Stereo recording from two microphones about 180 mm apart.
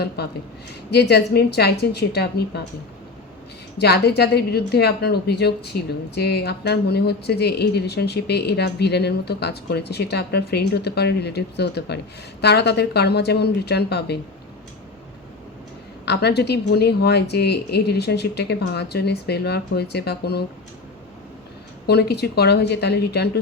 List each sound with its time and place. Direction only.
0.9 s speech: 65° left (ahead or behind)
3.8 s a woman's voice: 65° left (ahead or behind)
16.0 s speech: 65° left (ahead or behind)
21.8 s speech: 65° left (ahead or behind)